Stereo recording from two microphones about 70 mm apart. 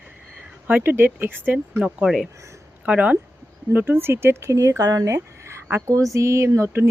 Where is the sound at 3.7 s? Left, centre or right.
Right.